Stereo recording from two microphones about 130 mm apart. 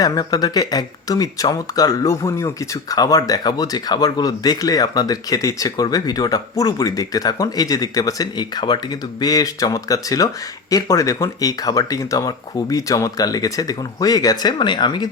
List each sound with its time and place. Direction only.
0.0 s speech: 30° left (ahead or behind)